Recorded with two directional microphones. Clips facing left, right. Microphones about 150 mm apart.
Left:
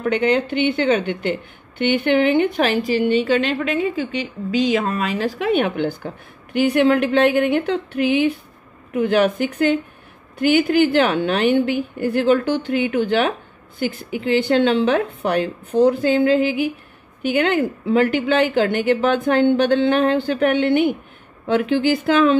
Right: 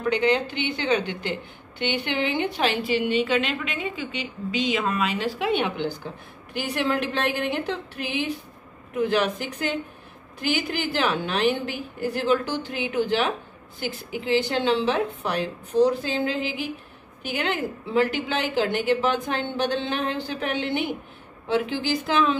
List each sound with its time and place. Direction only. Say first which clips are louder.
0.0 s a woman's voice: left 4 dB; 55° left (ahead or behind)
6.5 s speech: left 10 dB; 60° left (ahead or behind)
10.4 s speech: left 11 dB; 60° left (ahead or behind)